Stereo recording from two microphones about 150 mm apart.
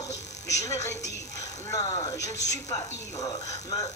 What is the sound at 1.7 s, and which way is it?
Speech, 25° left (ahead or behind).